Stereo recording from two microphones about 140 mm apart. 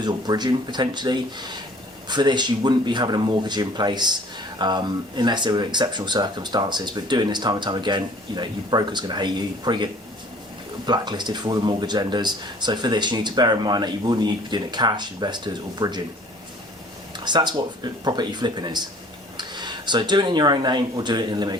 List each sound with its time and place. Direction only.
0.0 s speech: 30° right (ahead or behind)
17.2 s speech: 30° right (ahead or behind)